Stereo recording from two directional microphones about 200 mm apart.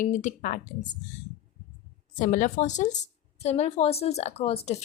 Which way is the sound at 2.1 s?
40° left (ahead or behind).